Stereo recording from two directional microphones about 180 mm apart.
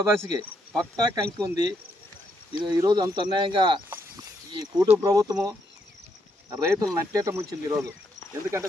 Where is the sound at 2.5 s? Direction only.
25° right (ahead or behind).